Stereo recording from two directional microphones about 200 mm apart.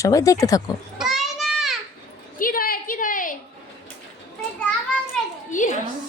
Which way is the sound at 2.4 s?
45° left (ahead or behind).